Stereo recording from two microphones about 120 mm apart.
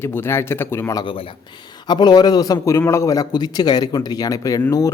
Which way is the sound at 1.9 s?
35° left (ahead or behind).